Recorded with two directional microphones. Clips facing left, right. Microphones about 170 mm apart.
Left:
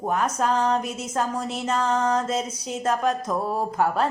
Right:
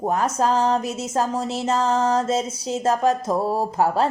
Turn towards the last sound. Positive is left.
turn(degrees=-30)  # may be behind; listen again after turning